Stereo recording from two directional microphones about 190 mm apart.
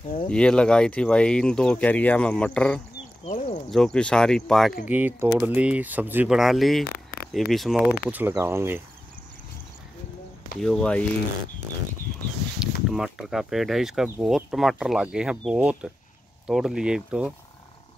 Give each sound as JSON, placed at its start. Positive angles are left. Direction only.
{"t": 0.3, "sound": "speech", "side_deg": 5}
{"t": 3.3, "sound": "speech", "side_deg": 40}
{"t": 3.7, "sound": "speech", "side_deg": 5}
{"t": 4.8, "sound": "speech", "side_deg": -10}
{"t": 6.9, "sound": "a sound", "side_deg": 55}
{"t": 7.3, "sound": "speech", "side_deg": 0}
{"t": 10.6, "sound": "speech", "side_deg": 5}
{"t": 12.6, "sound": "a sound", "side_deg": -5}
{"t": 12.9, "sound": "speech", "side_deg": -5}